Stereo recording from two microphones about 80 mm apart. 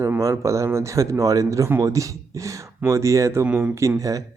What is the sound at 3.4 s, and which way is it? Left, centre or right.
Speech, centre.